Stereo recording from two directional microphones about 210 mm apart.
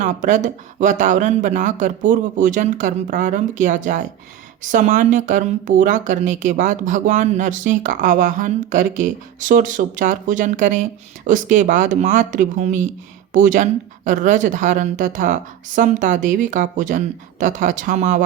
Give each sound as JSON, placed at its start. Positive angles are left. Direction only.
{"t": 0.0, "sound": "speech", "side_deg": -35}